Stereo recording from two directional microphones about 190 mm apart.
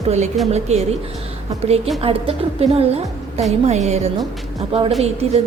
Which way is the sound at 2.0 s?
30° right (ahead or behind).